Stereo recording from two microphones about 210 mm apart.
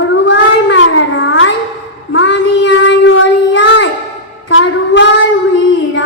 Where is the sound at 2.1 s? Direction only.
60° left (ahead or behind).